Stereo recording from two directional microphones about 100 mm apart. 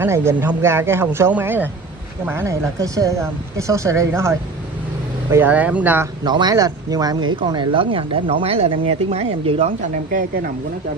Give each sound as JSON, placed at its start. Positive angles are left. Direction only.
{"t": 0.0, "sound": "a man's voice", "side_deg": -25}
{"t": 5.3, "sound": "speech", "side_deg": -15}
{"t": 6.2, "sound": "speech", "side_deg": -45}